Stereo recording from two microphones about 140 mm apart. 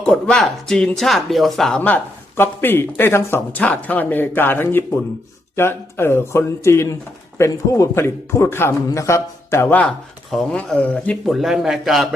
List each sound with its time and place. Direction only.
0.0 s a man's voice: 5° left (ahead or behind)